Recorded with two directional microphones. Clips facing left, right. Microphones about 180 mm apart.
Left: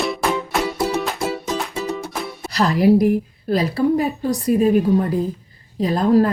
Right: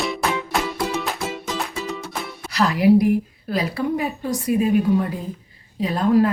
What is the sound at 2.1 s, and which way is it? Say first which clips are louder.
Music: left 3 dB; centre (ahead or behind).